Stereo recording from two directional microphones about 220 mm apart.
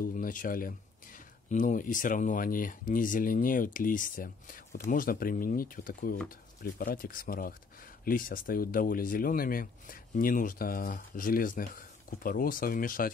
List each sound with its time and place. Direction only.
0.0 s speech: 40° left (ahead or behind)